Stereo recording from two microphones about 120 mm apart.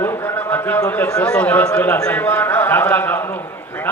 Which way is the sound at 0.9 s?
15° left (ahead or behind).